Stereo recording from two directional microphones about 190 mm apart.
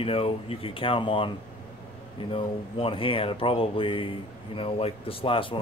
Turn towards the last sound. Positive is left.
turn(degrees=25)  # may be behind; listen again after turning